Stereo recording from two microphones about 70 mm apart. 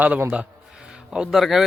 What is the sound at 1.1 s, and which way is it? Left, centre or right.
Speech, centre.